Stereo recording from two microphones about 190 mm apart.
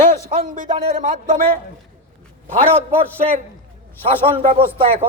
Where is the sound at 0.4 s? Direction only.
45° right (ahead or behind).